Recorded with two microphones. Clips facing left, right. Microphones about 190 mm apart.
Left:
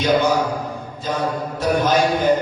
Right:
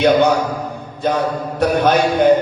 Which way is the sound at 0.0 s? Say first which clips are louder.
Right 4 dB; 65° right (ahead or behind).